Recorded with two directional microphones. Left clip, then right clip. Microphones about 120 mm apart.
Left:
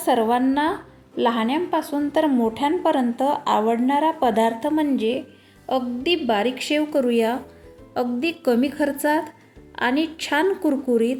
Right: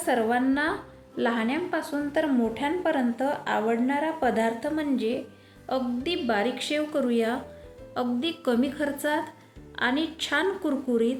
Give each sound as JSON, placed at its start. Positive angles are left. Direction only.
{"t": 0.0, "sound": "a woman's voice", "side_deg": 45}
{"t": 2.2, "sound": "a woman's voice", "side_deg": 50}